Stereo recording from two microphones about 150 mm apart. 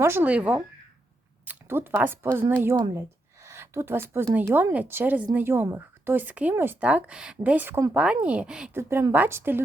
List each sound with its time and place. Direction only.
0.0 s a woman's voice: 15° right (ahead or behind)
8.7 s a woman's voice: 15° right (ahead or behind)